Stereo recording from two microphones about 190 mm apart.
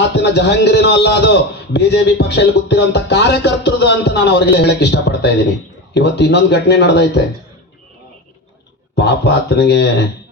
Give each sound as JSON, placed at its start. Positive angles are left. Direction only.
{"t": 0.1, "sound": "a man's voice", "side_deg": 60}
{"t": 9.0, "sound": "a man's voice", "side_deg": 60}